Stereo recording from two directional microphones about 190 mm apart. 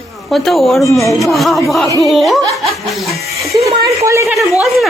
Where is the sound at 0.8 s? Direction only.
15° left (ahead or behind).